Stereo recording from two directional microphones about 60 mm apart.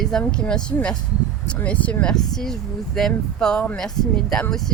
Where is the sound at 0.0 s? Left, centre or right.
Centre.